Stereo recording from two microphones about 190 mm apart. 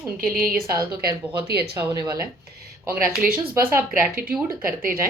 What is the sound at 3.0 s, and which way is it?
Speech, 50° right (ahead or behind).